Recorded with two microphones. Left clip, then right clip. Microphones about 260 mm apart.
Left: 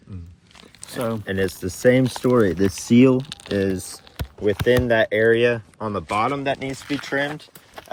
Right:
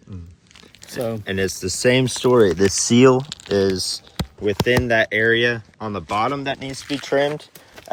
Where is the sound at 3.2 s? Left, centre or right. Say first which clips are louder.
Right 4 dB; left.